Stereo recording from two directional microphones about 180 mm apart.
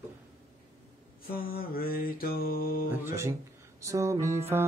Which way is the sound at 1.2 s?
55° left (ahead or behind).